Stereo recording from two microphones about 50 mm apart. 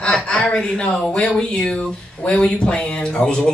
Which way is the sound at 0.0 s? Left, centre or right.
Left.